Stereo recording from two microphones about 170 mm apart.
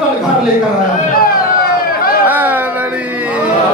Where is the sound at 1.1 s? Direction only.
60° left (ahead or behind).